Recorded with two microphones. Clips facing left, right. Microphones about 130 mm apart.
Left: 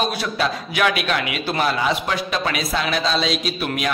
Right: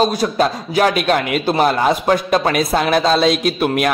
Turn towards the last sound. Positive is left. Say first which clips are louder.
# right 8 dB
turn(degrees=-55)  # may be behind; listen again after turning